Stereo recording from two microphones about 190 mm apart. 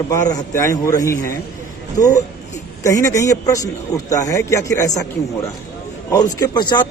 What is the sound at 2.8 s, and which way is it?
A man's voice, 15° left (ahead or behind).